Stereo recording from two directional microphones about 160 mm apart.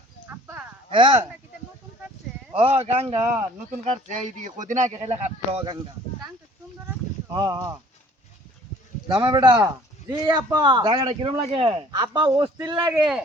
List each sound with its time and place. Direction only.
0.3 s livestock: 10° right (ahead or behind)
0.9 s speech: 30° right (ahead or behind)
2.6 s speech: 40° right (ahead or behind)
3.7 s speech: 55° right (ahead or behind)
4.9 s speech: 35° right (ahead or behind)
7.3 s a man's voice: 25° right (ahead or behind)
9.1 s a man's voice: 25° right (ahead or behind)
12.9 s a man's voice: 5° right (ahead or behind)